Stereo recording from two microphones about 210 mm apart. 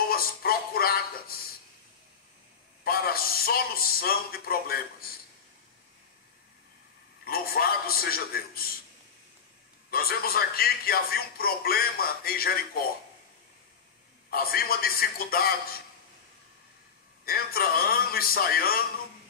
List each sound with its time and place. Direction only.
0.1 s music: 45° left (ahead or behind)
2.8 s a man's voice: 45° left (ahead or behind)
7.2 s a man's voice: 45° left (ahead or behind)
9.8 s a man's voice: 45° left (ahead or behind)
14.3 s a man's voice: 45° left (ahead or behind)
17.2 s a man's voice: 45° left (ahead or behind)